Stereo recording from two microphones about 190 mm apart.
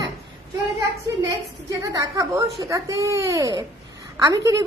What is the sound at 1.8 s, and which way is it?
Speech, 20° right (ahead or behind).